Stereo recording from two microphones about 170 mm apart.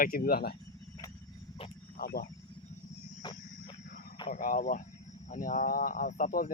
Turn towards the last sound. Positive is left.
turn(degrees=50)  # may be behind; listen again after turning